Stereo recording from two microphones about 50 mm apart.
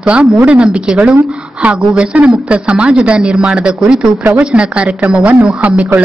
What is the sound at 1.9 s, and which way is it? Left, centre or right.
A woman's voice, right.